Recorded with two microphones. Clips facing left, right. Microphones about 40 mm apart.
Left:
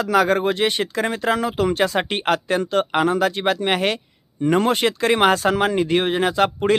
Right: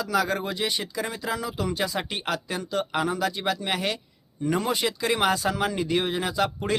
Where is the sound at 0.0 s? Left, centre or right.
Left.